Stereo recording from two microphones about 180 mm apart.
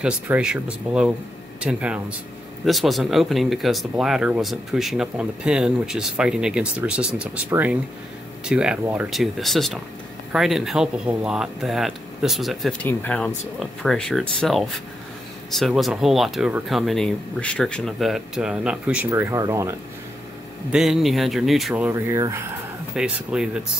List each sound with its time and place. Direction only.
0.0 s speech: 5° right (ahead or behind)
20.7 s speech: centre (ahead or behind)
21.9 s speech: 15° right (ahead or behind)